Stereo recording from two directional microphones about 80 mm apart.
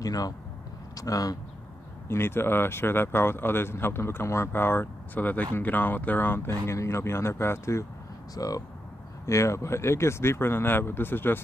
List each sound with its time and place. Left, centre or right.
0.0 s speech: left
2.0 s speech: left
8.4 s speech: left